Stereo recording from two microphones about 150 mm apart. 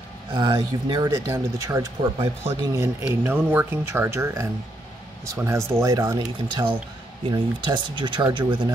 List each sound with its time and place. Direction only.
0.3 s speech: 35° right (ahead or behind)
1.1 s speech: 20° right (ahead or behind)